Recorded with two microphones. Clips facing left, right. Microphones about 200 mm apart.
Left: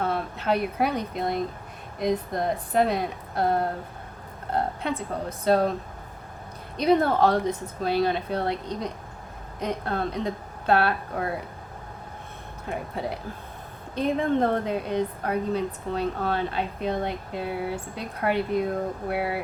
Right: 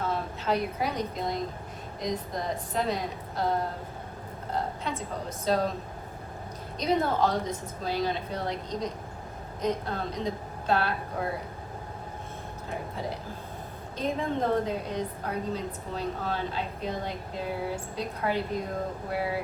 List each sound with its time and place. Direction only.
0.0 s a woman's voice: 60° left (ahead or behind)
4.5 s a woman's voice: 60° left (ahead or behind)
6.7 s a woman's voice: 60° left (ahead or behind)
12.6 s a woman's voice: 65° left (ahead or behind)